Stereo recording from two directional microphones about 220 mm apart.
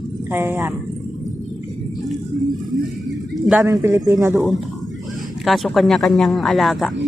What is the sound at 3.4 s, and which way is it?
Speech, 10° right (ahead or behind).